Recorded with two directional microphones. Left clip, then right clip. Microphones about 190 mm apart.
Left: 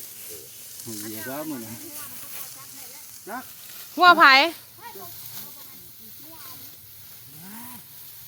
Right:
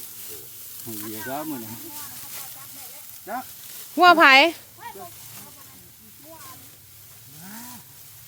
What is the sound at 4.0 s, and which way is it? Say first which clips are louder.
Speech: right 1 dB; 45° right (ahead or behind).